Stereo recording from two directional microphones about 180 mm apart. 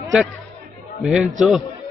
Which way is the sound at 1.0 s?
Centre (ahead or behind).